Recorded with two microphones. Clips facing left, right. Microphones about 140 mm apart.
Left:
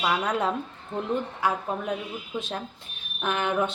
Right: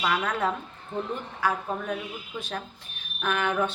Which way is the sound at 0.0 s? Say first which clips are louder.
Left 1 dB; 15° left (ahead or behind).